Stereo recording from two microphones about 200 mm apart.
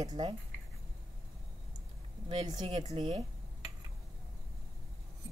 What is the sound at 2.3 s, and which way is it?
Speech, 20° right (ahead or behind).